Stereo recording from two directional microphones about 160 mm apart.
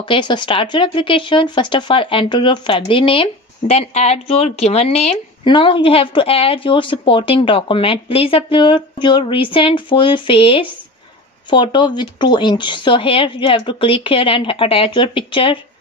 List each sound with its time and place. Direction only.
0.0 s speech: 30° left (ahead or behind)